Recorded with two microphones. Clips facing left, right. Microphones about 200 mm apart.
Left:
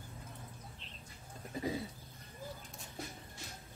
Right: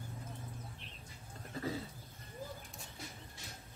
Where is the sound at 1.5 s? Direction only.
15° left (ahead or behind).